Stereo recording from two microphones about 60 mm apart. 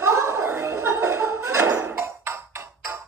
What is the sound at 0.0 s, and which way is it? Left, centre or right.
Clapping, right.